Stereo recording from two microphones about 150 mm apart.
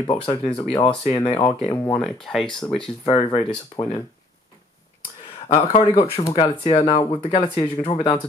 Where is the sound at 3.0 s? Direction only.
40° left (ahead or behind).